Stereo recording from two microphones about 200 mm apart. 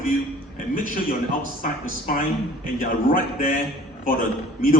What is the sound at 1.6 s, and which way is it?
A man's voice, 40° left (ahead or behind).